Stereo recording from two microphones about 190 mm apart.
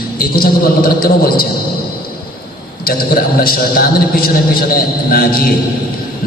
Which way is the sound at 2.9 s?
50° left (ahead or behind).